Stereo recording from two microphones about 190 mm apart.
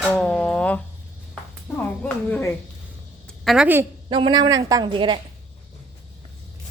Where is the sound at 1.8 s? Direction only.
5° left (ahead or behind).